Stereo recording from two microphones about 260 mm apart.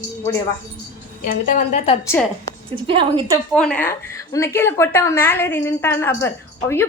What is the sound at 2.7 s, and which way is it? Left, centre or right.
Speech, centre.